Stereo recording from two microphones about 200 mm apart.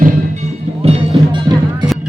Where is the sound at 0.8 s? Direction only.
30° right (ahead or behind).